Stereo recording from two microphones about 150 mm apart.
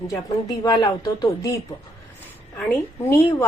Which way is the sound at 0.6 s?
25° left (ahead or behind).